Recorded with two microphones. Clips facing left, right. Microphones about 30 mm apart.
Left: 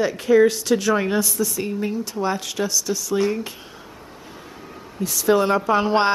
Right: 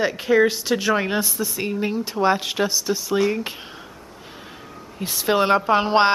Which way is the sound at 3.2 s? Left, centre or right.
Centre.